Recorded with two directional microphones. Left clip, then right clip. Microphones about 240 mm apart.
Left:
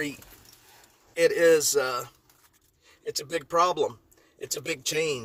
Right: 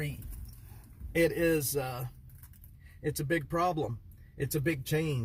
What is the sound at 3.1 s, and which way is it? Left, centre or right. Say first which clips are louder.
Speech: left 3 dB; centre.